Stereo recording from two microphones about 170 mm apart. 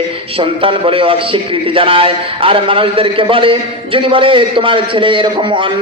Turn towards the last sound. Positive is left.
turn(degrees=-30)  # may be behind; listen again after turning